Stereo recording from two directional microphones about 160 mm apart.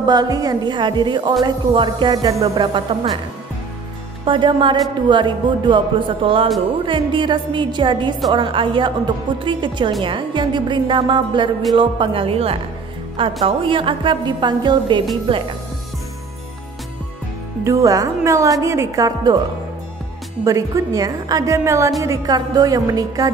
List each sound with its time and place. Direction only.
0.0 s a woman's voice: 25° right (ahead or behind)
4.2 s a woman's voice: 30° right (ahead or behind)
17.6 s a woman's voice: 20° right (ahead or behind)
20.4 s a woman's voice: 20° right (ahead or behind)